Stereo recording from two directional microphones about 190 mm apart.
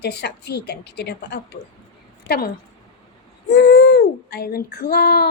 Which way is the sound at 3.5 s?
65° left (ahead or behind).